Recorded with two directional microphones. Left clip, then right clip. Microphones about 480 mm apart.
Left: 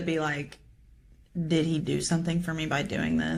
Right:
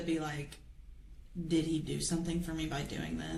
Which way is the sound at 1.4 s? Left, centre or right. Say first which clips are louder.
Left 6 dB; left.